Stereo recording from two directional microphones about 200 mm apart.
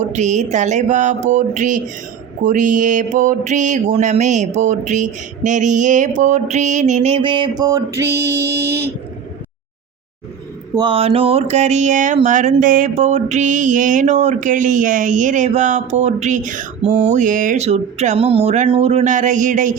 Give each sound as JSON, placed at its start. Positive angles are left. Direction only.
{"t": 0.1, "sound": "speech", "side_deg": -35}
{"t": 10.8, "sound": "speech", "side_deg": -25}